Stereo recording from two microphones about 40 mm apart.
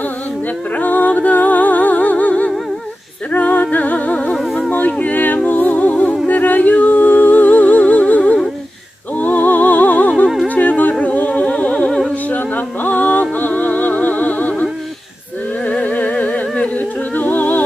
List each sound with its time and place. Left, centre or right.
0.8 s music: left
4.9 s a sound: left
5.5 s music: left
10.5 s humming: left
12.3 s music: left
15.7 s humming: left